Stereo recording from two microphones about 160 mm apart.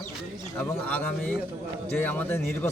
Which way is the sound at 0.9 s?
10° left (ahead or behind).